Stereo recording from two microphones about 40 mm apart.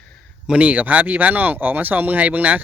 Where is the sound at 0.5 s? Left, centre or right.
Right.